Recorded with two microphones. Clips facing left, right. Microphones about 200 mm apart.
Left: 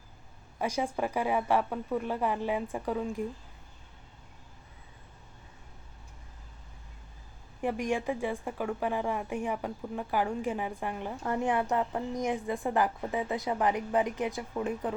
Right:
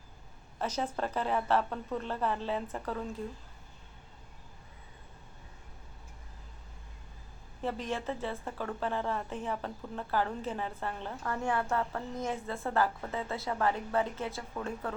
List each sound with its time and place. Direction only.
0.6 s a woman's voice: 10° left (ahead or behind)
7.6 s a woman's voice: 15° left (ahead or behind)